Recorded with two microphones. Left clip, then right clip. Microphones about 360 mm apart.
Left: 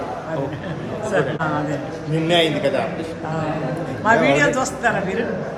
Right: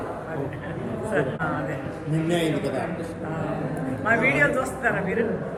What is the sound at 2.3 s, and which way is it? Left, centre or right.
Speech, centre.